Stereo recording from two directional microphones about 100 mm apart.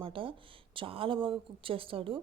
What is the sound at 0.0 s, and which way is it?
A woman's voice, 60° right (ahead or behind).